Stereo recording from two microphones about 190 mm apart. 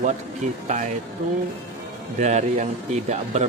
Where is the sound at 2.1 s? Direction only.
40° right (ahead or behind).